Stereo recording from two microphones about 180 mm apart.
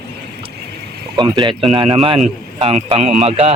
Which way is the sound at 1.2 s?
25° right (ahead or behind).